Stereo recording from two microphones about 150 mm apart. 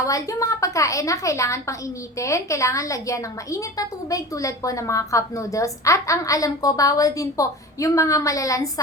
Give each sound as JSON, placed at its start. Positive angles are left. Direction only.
{"t": 0.0, "sound": "a woman's voice", "side_deg": 20}